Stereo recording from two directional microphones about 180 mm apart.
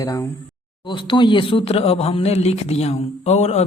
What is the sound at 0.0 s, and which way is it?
Speech, 20° left (ahead or behind).